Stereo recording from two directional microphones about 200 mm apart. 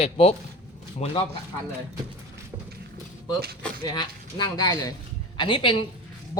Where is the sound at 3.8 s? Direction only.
20° left (ahead or behind).